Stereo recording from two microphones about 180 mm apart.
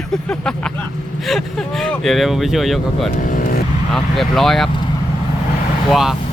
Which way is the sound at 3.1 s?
50° left (ahead or behind).